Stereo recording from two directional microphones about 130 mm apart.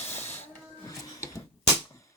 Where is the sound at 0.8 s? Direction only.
25° left (ahead or behind).